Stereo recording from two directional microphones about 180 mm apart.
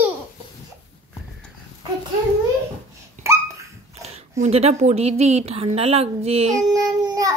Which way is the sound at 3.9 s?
35° right (ahead or behind).